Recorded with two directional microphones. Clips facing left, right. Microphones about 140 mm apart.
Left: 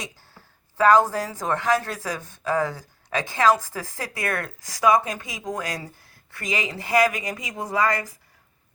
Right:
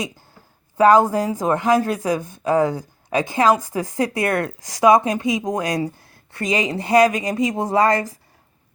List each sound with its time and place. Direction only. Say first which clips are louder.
0.8 s a woman's voice: right 4 dB; 15° right (ahead or behind)